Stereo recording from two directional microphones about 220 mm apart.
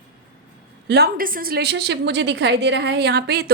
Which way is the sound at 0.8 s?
45° right (ahead or behind).